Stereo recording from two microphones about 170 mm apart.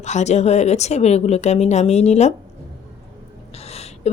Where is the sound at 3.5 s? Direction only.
40° left (ahead or behind).